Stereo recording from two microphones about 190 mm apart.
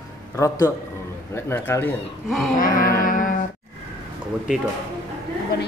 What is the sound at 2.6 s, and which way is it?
Music, 45° left (ahead or behind).